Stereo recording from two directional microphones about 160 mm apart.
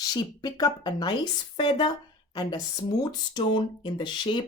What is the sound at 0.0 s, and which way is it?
Speech, 25° left (ahead or behind).